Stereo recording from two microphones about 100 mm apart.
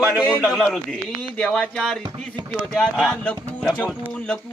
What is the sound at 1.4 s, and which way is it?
Speech, 10° left (ahead or behind).